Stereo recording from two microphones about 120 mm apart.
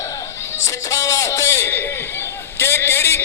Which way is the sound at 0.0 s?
25° left (ahead or behind).